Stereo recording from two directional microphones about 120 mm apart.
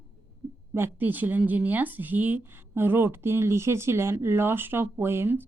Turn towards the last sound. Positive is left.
turn(degrees=-20)  # may be behind; listen again after turning